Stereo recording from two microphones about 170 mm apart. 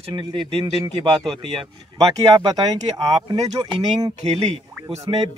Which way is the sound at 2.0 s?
30° right (ahead or behind).